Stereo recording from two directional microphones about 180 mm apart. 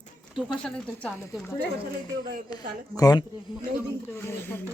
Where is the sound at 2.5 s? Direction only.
20° left (ahead or behind).